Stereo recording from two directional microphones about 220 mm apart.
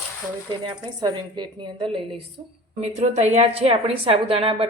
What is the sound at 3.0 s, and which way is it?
A woman's voice, 30° right (ahead or behind).